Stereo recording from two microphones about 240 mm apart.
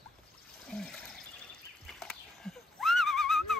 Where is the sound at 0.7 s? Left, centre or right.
Centre.